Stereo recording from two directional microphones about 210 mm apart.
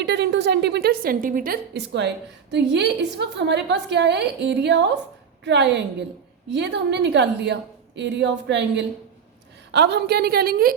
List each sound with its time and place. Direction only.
0.0 s a woman's voice: 55° right (ahead or behind)